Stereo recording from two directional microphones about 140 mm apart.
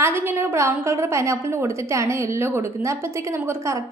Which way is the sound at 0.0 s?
15° right (ahead or behind).